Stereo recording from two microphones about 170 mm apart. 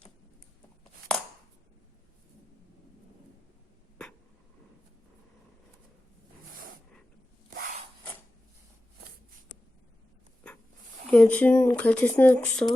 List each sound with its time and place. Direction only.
7.5 s rub: 55° right (ahead or behind)
11.1 s speech: 5° left (ahead or behind)